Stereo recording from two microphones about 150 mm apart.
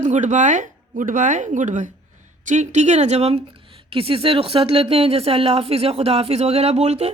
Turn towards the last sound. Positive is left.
turn(degrees=-45)  # may be behind; listen again after turning